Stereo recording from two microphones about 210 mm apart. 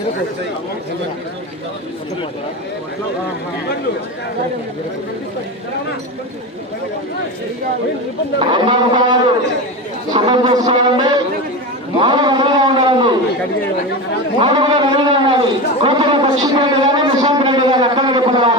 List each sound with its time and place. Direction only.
8.4 s a man's voice: 25° right (ahead or behind)
14.3 s a man's voice: 20° right (ahead or behind)